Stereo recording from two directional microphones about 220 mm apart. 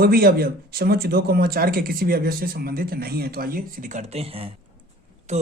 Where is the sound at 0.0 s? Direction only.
45° right (ahead or behind).